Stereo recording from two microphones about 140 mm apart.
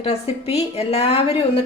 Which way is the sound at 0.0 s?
45° left (ahead or behind).